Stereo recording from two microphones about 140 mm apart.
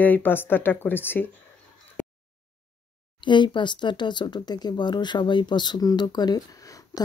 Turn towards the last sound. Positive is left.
turn(degrees=25)  # may be behind; listen again after turning